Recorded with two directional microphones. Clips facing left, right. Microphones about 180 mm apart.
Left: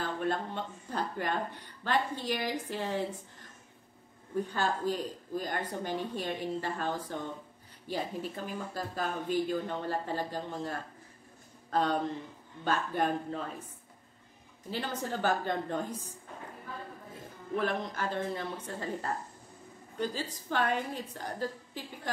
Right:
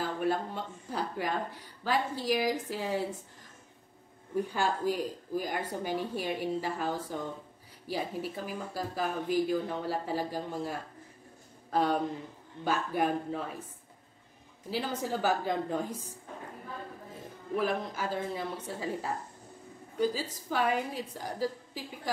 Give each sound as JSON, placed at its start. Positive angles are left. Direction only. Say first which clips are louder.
{"t": 0.0, "sound": "speech", "louder": "right 2 dB", "side_deg": -10}
{"t": 4.5, "sound": "speech", "louder": "right 1 dB", "side_deg": -10}
{"t": 14.7, "sound": "speech", "louder": "right 2 dB", "side_deg": -10}
{"t": 17.6, "sound": "speech", "louder": "right 1 dB", "side_deg": -5}